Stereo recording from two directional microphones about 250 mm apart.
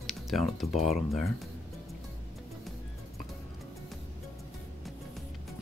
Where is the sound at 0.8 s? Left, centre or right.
Left.